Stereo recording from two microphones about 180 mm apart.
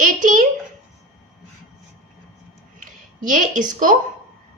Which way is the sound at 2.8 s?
45° right (ahead or behind).